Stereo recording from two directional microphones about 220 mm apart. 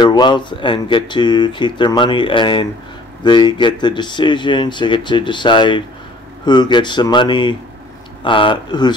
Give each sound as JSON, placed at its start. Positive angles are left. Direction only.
{"t": 0.0, "sound": "speech", "side_deg": 20}